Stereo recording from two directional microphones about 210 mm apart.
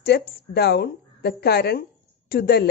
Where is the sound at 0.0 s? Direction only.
50° left (ahead or behind).